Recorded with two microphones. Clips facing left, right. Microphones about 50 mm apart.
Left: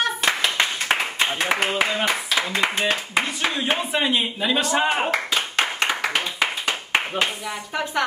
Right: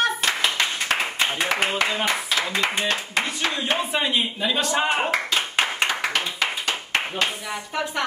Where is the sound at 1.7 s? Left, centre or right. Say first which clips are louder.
Left 1 dB; left.